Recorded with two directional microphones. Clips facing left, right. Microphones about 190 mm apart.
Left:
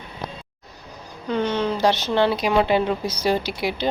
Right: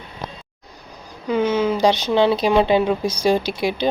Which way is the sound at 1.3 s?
5° right (ahead or behind).